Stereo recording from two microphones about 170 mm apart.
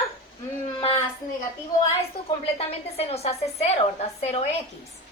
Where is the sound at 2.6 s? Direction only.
35° left (ahead or behind).